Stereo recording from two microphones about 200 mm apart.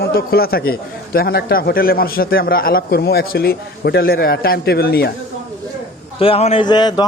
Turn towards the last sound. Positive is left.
turn(degrees=20)  # may be behind; listen again after turning